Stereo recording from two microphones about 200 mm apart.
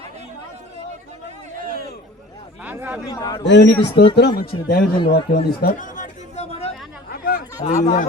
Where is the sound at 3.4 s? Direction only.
60° left (ahead or behind).